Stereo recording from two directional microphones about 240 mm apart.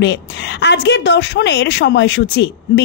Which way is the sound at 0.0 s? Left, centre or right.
Left.